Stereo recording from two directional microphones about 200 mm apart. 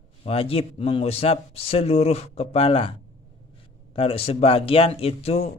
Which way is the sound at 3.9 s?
30° left (ahead or behind).